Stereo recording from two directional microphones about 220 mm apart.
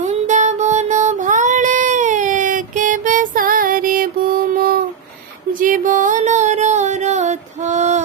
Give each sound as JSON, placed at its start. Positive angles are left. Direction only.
{"t": 0.0, "sound": "music", "side_deg": -30}